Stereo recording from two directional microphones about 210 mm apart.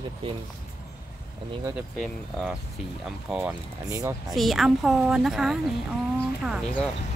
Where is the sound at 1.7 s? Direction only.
5° right (ahead or behind).